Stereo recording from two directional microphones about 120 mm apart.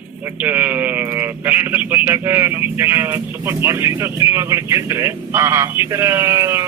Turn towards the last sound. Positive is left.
turn(degrees=-25)  # may be behind; listen again after turning